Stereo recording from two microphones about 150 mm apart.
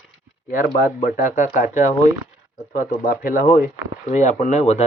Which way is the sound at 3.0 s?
65° left (ahead or behind).